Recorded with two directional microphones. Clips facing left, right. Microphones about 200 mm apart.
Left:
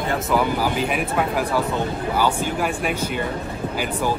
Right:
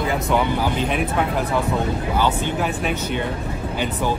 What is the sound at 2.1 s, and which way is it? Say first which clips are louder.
Speech: even; 10° left (ahead or behind).